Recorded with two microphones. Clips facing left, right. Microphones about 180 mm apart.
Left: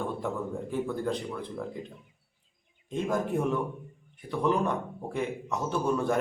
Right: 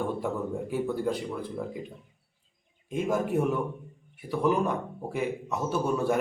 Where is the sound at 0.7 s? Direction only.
10° right (ahead or behind).